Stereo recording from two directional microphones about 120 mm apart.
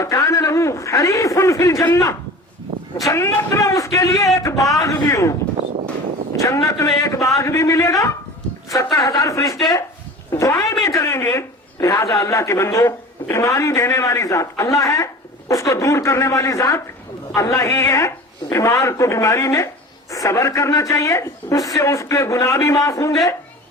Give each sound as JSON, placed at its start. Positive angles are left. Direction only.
{"t": 0.0, "sound": "a man's voice", "side_deg": 25}
{"t": 6.4, "sound": "a woman's voice", "side_deg": 25}